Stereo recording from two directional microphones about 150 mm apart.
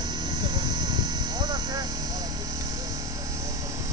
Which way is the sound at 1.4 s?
30° right (ahead or behind).